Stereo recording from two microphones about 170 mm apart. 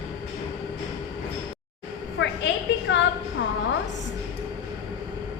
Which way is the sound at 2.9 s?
90° left.